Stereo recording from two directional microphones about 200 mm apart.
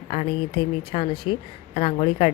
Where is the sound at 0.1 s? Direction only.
30° left (ahead or behind).